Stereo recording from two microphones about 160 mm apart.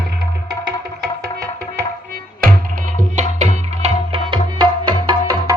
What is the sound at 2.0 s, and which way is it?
Music, 65° right (ahead or behind).